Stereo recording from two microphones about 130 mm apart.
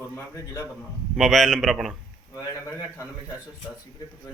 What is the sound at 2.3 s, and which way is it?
Speech, 25° left (ahead or behind).